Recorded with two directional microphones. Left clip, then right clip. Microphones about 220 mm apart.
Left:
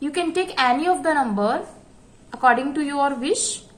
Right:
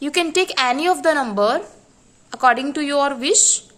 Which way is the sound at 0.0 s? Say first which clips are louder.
Right 4 dB; 50° right (ahead or behind).